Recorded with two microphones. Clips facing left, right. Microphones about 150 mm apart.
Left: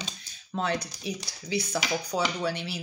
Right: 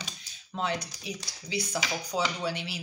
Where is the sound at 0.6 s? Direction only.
20° right (ahead or behind).